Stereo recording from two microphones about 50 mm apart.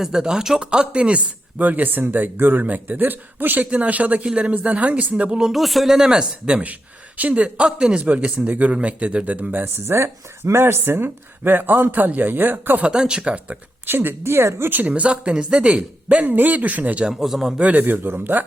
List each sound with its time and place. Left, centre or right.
0.0 s speech: centre
1.5 s speech: right
3.7 s speech: right
5.4 s speech: centre; by 9.6 s right
9.8 s speech: right
12.9 s speech: centre
13.8 s speech: right
14.7 s speech: right
17.1 s speech: centre
17.6 s speech: right